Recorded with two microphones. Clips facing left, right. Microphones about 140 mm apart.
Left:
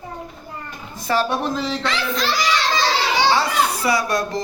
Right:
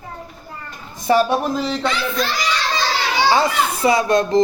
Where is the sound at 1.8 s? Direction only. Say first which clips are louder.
Right 2 dB; 90° left.